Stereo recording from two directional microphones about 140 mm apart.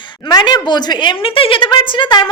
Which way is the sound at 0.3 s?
30° left (ahead or behind).